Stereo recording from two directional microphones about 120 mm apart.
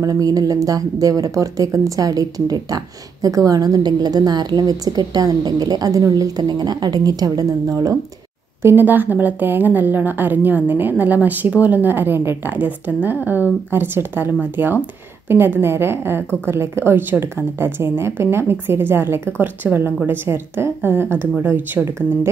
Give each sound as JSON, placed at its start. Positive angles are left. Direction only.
{"t": 0.0, "sound": "a woman's voice", "side_deg": -30}
{"t": 8.6, "sound": "a woman's voice", "side_deg": -15}